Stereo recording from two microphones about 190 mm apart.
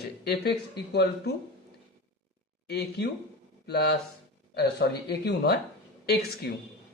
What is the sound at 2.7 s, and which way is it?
A man's voice, 60° left (ahead or behind).